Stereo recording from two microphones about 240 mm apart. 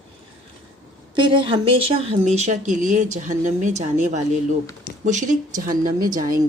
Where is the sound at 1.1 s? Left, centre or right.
Centre.